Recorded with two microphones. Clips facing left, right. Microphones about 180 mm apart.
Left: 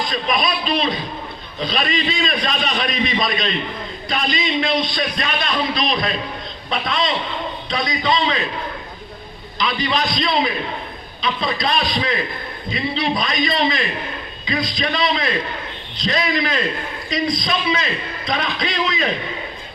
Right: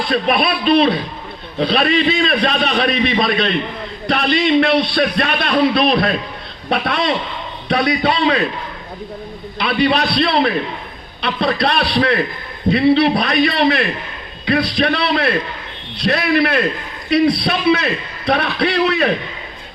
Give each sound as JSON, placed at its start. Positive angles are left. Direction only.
{"t": 0.0, "sound": "a man's voice", "side_deg": -60}
{"t": 9.6, "sound": "a sound", "side_deg": -65}
{"t": 9.9, "sound": "a man's voice", "side_deg": -65}